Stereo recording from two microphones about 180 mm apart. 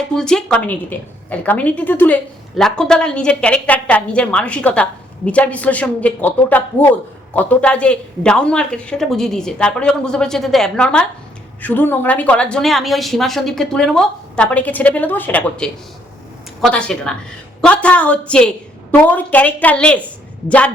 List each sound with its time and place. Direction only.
0.1 s a woman's voice: 5° left (ahead or behind)